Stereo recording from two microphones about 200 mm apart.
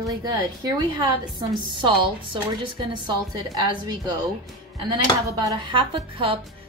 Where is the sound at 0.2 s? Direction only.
20° right (ahead or behind).